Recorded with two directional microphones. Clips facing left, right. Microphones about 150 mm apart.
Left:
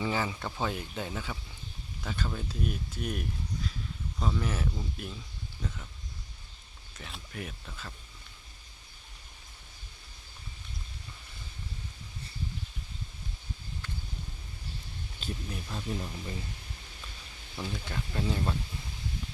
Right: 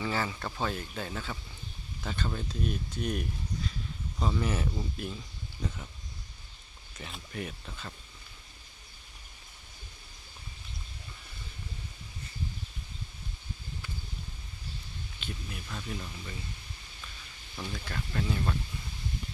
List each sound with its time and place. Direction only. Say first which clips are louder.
0.0 s speech: left 1 dB; 15° left (ahead or behind); by 5.9 s 10° right (ahead or behind)
7.0 s speech: right 2 dB; centre (ahead or behind)
15.2 s speech: left 3 dB; 40° left (ahead or behind)
15.7 s speech: left 3 dB; 25° left (ahead or behind)
17.6 s speech: left 1 dB; 15° left (ahead or behind)